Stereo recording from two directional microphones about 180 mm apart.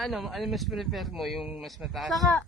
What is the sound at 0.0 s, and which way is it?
Speech, centre (ahead or behind).